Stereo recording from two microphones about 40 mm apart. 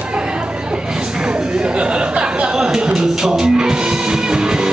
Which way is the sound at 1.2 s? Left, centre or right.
Right.